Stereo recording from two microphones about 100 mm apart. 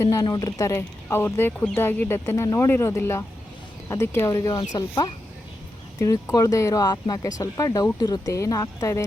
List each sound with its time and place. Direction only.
0.0 s speech: 30° left (ahead or behind)
4.3 s speech: 35° left (ahead or behind)